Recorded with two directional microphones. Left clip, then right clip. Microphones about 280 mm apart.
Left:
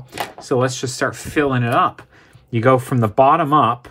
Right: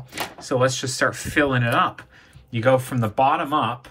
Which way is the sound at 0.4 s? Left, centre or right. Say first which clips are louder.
Left 2 dB; left.